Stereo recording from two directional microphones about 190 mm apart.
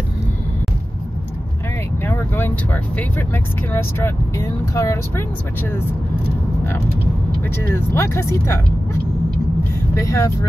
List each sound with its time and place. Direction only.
2.0 s speech: 10° left (ahead or behind)
7.5 s speech: 10° left (ahead or behind)
9.9 s speech: 15° left (ahead or behind)